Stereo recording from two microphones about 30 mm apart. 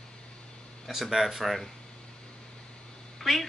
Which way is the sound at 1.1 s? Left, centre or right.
Centre.